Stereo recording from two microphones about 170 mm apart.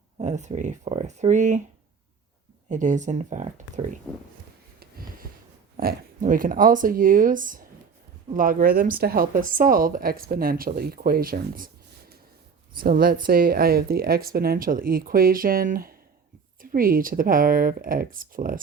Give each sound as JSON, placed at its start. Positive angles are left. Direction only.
{"t": 0.2, "sound": "speech", "side_deg": -45}
{"t": 2.6, "sound": "speech", "side_deg": -45}
{"t": 4.1, "sound": "speech", "side_deg": 10}
{"t": 5.7, "sound": "speech", "side_deg": -55}